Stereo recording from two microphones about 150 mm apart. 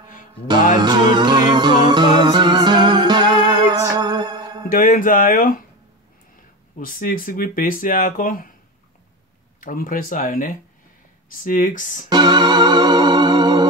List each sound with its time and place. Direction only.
0.7 s music: 30° right (ahead or behind)
4.6 s speech: 60° left (ahead or behind)
6.8 s speech: 65° left (ahead or behind)
9.6 s speech: 65° left (ahead or behind)
12.1 s music: 30° right (ahead or behind)